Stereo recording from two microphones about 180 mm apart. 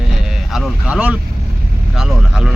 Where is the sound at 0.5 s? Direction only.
5° right (ahead or behind).